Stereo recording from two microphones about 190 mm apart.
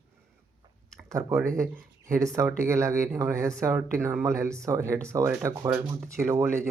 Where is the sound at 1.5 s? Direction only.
15° right (ahead or behind).